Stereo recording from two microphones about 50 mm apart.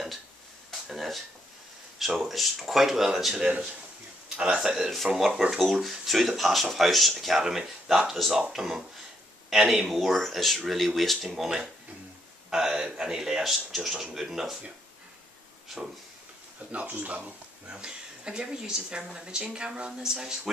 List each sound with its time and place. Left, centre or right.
0.8 s a sound: centre
2.0 s speech: centre
4.6 s speech: centre
16.7 s speech: right
17.6 s speech: centre